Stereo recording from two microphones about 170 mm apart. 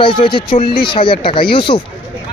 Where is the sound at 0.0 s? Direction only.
30° left (ahead or behind).